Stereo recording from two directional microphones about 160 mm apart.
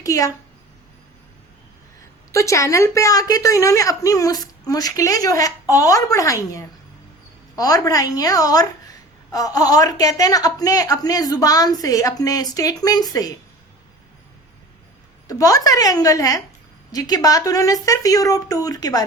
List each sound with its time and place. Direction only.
0.0 s a woman's voice: 20° left (ahead or behind)
2.3 s a woman's voice: 20° left (ahead or behind)
15.3 s a woman's voice: 20° left (ahead or behind)